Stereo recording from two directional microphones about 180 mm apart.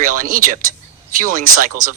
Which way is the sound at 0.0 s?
50° right (ahead or behind).